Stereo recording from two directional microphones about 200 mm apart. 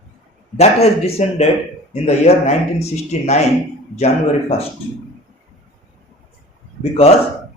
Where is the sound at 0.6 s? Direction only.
30° left (ahead or behind).